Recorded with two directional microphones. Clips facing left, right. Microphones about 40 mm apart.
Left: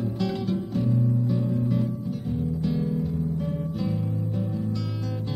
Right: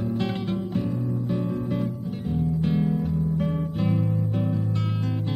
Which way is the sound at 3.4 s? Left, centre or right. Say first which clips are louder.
Right 3 dB; right.